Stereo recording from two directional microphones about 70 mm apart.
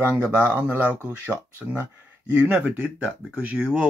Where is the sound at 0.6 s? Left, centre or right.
Right.